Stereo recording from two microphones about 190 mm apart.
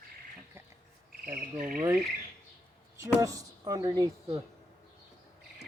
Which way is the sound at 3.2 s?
20° right (ahead or behind).